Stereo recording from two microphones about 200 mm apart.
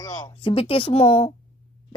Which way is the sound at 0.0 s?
25° left (ahead or behind).